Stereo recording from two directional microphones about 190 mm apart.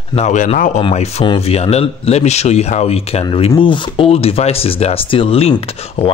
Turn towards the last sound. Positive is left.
turn(degrees=30)  # may be behind; listen again after turning